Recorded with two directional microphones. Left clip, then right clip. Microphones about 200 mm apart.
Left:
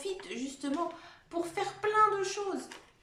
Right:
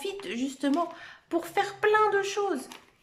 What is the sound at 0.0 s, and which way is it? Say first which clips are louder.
A woman's voice: right 5 dB; 45° right (ahead or behind).